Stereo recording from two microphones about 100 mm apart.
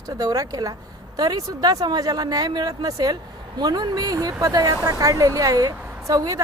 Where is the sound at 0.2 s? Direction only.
40° right (ahead or behind).